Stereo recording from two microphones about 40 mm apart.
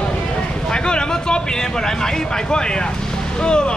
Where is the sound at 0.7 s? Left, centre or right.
Left.